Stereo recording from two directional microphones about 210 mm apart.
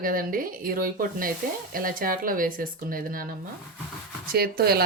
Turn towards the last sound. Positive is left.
turn(degrees=-45)  # may be behind; listen again after turning